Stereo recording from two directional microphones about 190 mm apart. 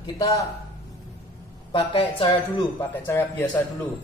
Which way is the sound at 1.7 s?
30° left (ahead or behind).